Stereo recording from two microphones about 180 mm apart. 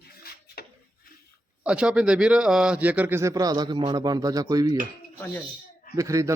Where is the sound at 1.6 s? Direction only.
5° right (ahead or behind).